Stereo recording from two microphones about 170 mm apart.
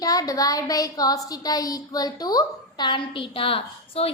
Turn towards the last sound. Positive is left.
turn(degrees=35)  # may be behind; listen again after turning